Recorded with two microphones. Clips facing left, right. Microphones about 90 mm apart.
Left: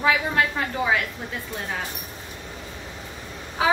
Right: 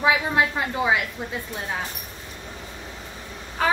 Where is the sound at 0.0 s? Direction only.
20° right (ahead or behind).